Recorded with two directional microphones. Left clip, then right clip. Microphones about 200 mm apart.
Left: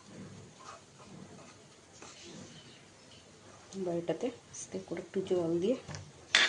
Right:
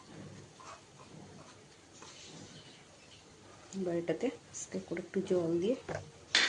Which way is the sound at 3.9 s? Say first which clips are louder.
Right 1 dB; centre (ahead or behind).